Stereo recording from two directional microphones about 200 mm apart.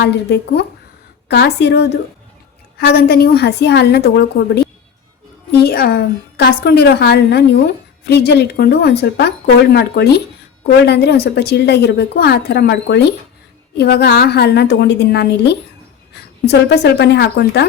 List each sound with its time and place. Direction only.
0.0 s a woman's voice: 55° left (ahead or behind)